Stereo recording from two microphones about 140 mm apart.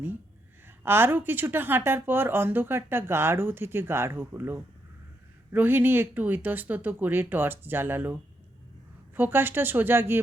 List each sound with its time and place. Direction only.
0.9 s speech: 15° right (ahead or behind)